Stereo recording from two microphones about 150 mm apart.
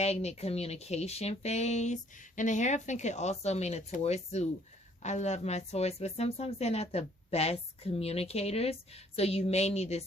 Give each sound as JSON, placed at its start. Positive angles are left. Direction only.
{"t": 0.0, "sound": "a woman's voice", "side_deg": 45}